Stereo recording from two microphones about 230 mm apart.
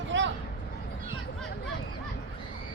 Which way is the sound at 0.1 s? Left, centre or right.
Right.